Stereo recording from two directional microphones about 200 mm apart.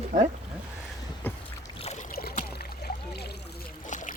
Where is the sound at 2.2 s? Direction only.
50° left (ahead or behind).